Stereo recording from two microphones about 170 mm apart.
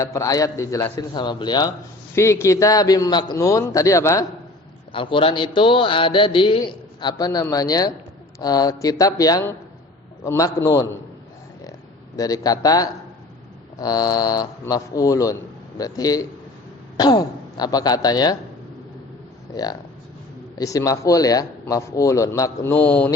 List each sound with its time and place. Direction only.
0.0 s speech: 20° left (ahead or behind)
4.9 s a man's voice: 30° left (ahead or behind)
12.1 s speech: 20° left (ahead or behind)
19.5 s speech: 25° left (ahead or behind)